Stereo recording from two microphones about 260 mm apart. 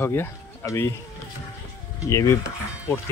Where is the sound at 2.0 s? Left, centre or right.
Centre.